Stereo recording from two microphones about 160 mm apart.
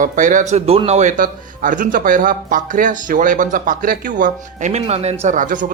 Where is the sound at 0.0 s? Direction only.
55° right (ahead or behind).